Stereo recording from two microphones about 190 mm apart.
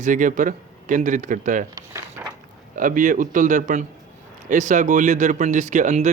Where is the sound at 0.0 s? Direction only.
40° right (ahead or behind).